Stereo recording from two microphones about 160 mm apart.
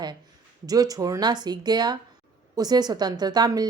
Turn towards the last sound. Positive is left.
turn(degrees=-25)  # may be behind; listen again after turning